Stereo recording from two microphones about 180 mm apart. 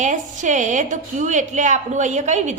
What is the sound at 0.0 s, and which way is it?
A woman's voice, 45° right (ahead or behind).